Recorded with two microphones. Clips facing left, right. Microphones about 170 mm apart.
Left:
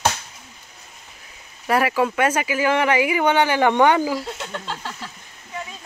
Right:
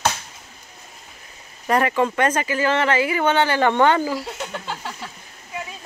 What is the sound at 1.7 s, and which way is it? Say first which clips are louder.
Speech: even; 5° left (ahead or behind).